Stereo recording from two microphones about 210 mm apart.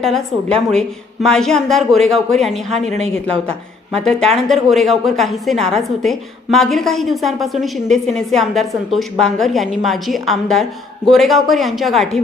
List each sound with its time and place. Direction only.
0.0 s a woman's voice: 5° left (ahead or behind)
2.8 s a woman's voice: 30° right (ahead or behind)
3.9 s a woman's voice: centre (ahead or behind)